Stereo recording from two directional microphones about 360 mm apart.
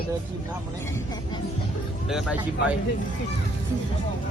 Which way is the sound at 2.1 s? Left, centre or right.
Centre.